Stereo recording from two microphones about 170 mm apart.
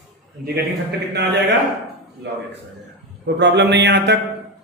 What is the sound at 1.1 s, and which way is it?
Speech, 80° right.